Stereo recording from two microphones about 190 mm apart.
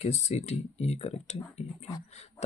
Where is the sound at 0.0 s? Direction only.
35° left (ahead or behind).